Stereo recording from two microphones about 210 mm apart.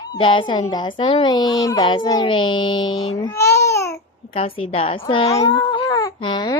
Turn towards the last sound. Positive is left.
turn(degrees=20)  # may be behind; listen again after turning